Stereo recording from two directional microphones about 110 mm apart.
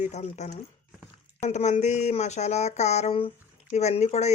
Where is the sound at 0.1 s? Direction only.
85° left.